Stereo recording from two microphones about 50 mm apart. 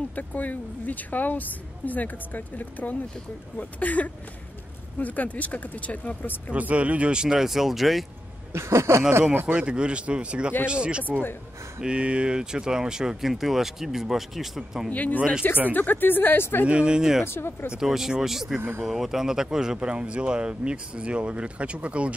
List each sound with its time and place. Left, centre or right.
0.1 s a woman's voice: left
6.5 s speech: right; by 8.0 s centre
8.5 s speech: right
9.3 s speech: right
9.6 s speech: centre
14.9 s a woman's voice: left
16.6 s speech: right
17.2 s speech: left
17.7 s speech: centre
18.6 s speech: right
18.9 s speech: centre; by 22.1 s right